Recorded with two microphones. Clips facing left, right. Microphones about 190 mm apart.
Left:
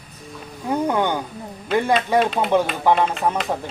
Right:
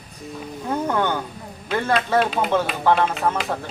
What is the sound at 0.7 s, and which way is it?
Speech, 15° left (ahead or behind).